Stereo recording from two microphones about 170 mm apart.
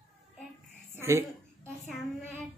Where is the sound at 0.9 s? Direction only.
15° right (ahead or behind).